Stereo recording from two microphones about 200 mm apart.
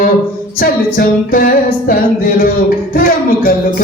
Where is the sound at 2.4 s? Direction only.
45° left (ahead or behind).